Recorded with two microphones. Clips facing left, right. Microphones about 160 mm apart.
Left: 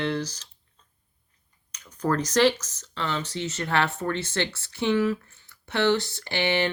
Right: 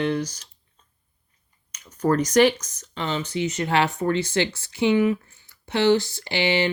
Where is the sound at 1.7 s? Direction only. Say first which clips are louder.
Right 4 dB; 10° right (ahead or behind).